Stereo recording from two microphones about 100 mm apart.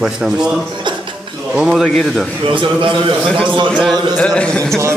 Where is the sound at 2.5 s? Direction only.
55° right (ahead or behind).